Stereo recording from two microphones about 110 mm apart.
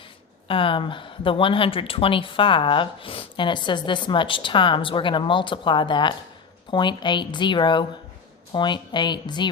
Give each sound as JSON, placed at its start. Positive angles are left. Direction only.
{"t": 0.4, "sound": "speech", "side_deg": 55}